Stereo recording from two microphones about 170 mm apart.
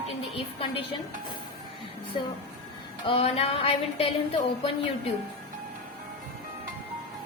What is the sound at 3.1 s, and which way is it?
A woman's voice, 35° left (ahead or behind).